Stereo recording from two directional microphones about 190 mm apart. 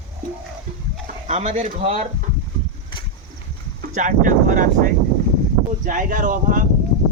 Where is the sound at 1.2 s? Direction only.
35° right (ahead or behind).